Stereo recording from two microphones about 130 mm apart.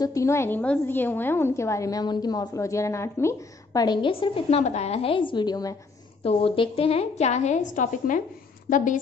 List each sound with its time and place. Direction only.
0.0 s a woman's voice: 25° left (ahead or behind)
6.2 s a woman's voice: 45° left (ahead or behind); by 8.2 s 75° left (ahead or behind)
8.6 s a woman's voice: 90° left